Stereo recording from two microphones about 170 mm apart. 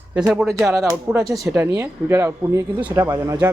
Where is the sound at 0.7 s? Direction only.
15° right (ahead or behind).